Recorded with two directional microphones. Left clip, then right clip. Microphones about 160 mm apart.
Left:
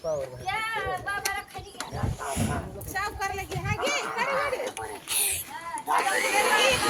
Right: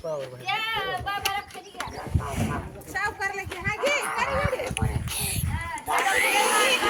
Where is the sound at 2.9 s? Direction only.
65° left (ahead or behind).